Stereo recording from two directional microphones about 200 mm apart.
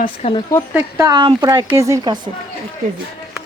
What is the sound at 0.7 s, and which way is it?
A woman's voice, 15° right (ahead or behind).